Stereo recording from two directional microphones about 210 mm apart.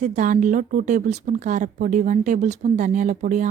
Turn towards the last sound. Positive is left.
turn(degrees=-35)  # may be behind; listen again after turning